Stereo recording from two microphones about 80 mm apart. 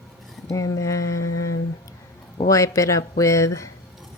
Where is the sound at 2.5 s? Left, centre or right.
Left.